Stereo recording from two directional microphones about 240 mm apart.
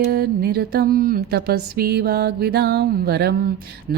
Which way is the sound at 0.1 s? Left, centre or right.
Right.